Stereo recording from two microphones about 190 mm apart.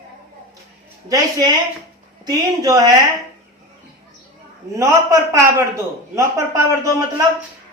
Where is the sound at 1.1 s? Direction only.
20° right (ahead or behind).